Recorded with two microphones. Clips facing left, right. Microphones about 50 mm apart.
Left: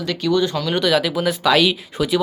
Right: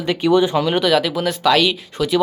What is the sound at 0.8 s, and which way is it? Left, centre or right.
Speech, centre.